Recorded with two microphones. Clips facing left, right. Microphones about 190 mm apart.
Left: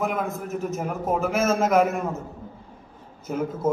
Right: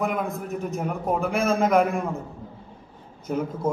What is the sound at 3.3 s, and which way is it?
Speech, 5° left (ahead or behind).